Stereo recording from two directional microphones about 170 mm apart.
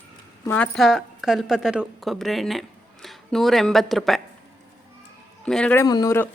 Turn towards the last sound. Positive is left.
turn(degrees=20)  # may be behind; listen again after turning